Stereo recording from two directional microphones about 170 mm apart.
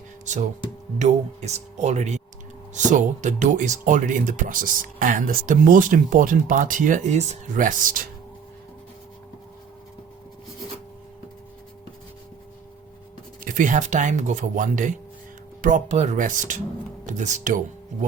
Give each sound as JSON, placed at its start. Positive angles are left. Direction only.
{"t": 0.9, "sound": "speech", "side_deg": -40}
{"t": 13.4, "sound": "speech", "side_deg": -50}